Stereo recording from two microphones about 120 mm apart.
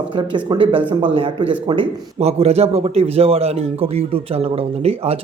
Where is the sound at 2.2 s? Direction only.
60° right (ahead or behind).